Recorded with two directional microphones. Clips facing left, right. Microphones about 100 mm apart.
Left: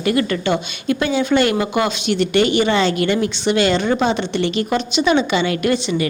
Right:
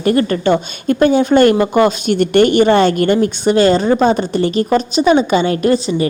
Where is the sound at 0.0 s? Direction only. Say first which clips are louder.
Right 5 dB; 40° right (ahead or behind).